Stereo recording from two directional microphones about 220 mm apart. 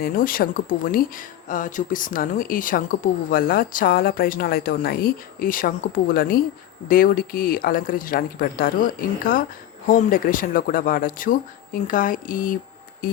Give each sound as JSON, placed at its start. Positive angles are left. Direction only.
{"t": 0.0, "sound": "speech", "side_deg": 40}